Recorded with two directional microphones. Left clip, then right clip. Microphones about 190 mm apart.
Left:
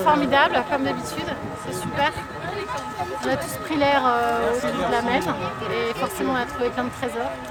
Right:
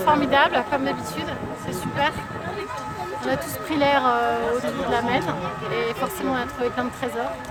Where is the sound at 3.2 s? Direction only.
Centre (ahead or behind).